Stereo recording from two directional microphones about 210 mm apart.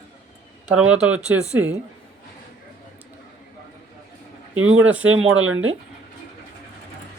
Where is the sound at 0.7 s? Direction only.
5° right (ahead or behind).